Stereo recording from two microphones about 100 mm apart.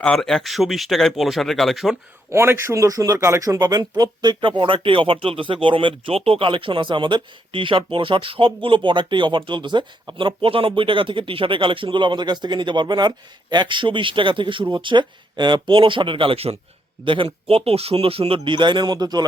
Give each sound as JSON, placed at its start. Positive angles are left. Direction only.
{"t": 0.0, "sound": "speech", "side_deg": 5}
{"t": 2.3, "sound": "speech", "side_deg": -25}